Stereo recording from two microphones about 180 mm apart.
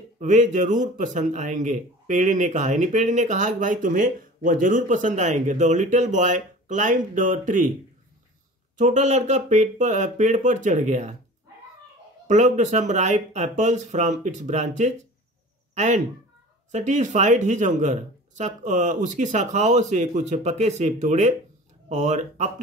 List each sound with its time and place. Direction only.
0.2 s a man's voice: 40° right (ahead or behind)
8.7 s speech: 40° right (ahead or behind)
12.3 s speech: 40° right (ahead or behind)